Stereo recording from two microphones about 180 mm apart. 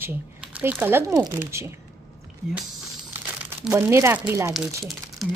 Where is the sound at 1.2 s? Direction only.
15° right (ahead or behind).